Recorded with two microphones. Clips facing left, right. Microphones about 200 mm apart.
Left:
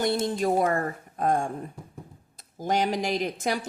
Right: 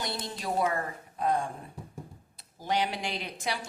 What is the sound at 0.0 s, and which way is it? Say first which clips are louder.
A woman's voice: left 11 dB; 50° left (ahead or behind).